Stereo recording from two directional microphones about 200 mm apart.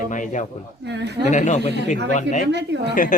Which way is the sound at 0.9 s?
60° right (ahead or behind).